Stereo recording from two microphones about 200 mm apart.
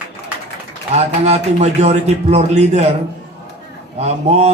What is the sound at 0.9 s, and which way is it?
A man's voice, 35° right (ahead or behind).